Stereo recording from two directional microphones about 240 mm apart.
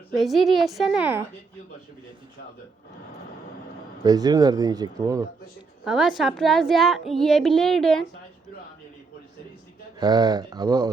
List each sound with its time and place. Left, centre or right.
0.2 s a woman's voice: centre
4.0 s speech: centre
5.8 s a woman's voice: centre
10.0 s speech: centre